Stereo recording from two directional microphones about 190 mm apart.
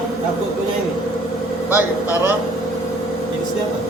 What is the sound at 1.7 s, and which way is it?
Speech, 10° right (ahead or behind).